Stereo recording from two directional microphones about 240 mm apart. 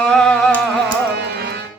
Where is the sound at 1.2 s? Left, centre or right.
Right.